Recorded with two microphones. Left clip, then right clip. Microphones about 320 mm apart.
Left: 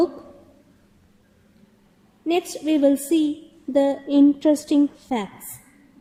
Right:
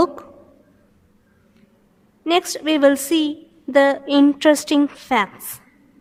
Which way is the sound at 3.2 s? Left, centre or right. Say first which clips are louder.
Even; right.